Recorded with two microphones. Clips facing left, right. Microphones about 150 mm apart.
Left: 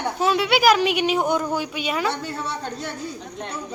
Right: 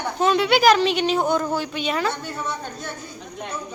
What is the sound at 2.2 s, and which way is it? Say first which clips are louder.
Speech: left 1 dB; 30° left (ahead or behind).